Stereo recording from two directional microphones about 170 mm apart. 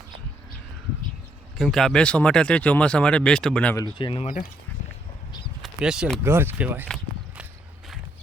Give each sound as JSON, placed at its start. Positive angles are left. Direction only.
{"t": 1.5, "sound": "speech", "side_deg": 0}
{"t": 3.9, "sound": "speech", "side_deg": 30}
{"t": 5.6, "sound": "speech", "side_deg": -5}
{"t": 6.8, "sound": "walk", "side_deg": 0}